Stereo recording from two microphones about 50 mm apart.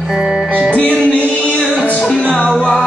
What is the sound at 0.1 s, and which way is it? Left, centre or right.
Music, centre.